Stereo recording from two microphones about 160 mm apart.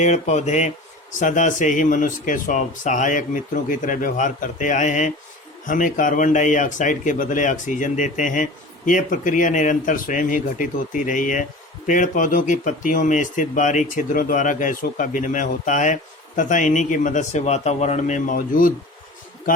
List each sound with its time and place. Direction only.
0.0 s speech: 45° left (ahead or behind)